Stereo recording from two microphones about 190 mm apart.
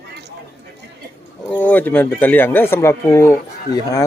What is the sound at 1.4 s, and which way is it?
Speech, 10° left (ahead or behind).